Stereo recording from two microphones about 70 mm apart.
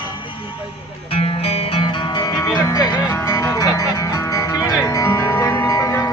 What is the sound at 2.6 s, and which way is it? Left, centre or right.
Speech, left.